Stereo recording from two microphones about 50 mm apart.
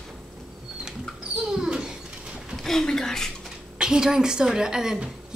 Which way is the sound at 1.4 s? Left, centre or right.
Centre.